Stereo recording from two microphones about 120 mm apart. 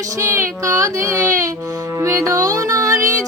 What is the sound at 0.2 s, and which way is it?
Child singing, 25° right (ahead or behind).